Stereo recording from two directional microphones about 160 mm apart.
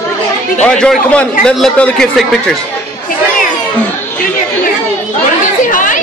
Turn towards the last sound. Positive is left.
turn(degrees=55)  # may be behind; listen again after turning